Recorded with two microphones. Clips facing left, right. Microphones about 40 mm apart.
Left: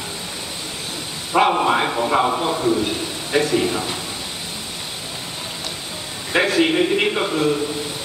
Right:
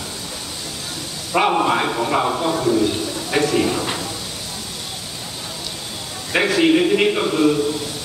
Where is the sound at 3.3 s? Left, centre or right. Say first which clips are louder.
Even; centre.